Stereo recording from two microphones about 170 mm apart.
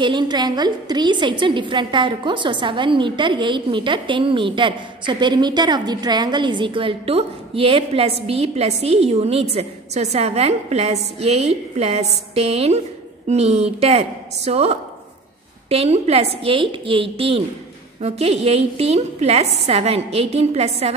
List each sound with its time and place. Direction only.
0.0 s a woman's voice: 25° right (ahead or behind)